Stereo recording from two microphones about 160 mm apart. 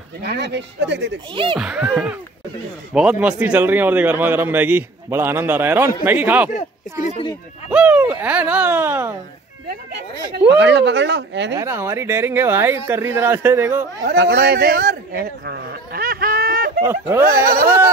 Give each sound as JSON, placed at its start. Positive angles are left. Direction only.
{"t": 0.2, "sound": "speech", "side_deg": -90}
{"t": 1.3, "sound": "speech", "side_deg": -30}
{"t": 1.6, "sound": "a man's voice", "side_deg": -5}
{"t": 7.7, "sound": "a man's voice", "side_deg": -10}
{"t": 10.5, "sound": "speech", "side_deg": -90}
{"t": 11.5, "sound": "a man's voice", "side_deg": -15}
{"t": 14.0, "sound": "speech", "side_deg": -90}
{"t": 16.8, "sound": "a man's voice", "side_deg": -15}